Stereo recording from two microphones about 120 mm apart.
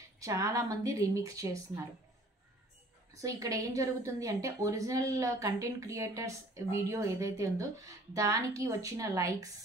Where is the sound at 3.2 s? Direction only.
25° right (ahead or behind).